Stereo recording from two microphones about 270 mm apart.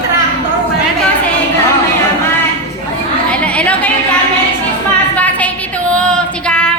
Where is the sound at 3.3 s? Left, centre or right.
Centre.